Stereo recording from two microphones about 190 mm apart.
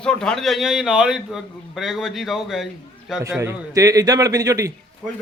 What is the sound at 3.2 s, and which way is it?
A man's voice, 15° right (ahead or behind).